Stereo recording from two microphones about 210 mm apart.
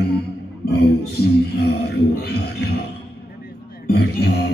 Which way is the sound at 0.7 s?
50° left (ahead or behind).